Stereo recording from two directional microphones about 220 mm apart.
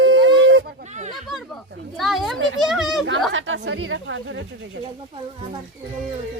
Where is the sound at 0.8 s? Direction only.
30° right (ahead or behind).